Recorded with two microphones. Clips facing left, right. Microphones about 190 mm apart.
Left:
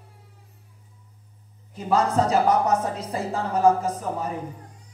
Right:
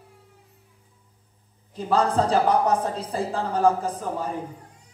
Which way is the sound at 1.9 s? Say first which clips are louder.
Even; 30° right (ahead or behind).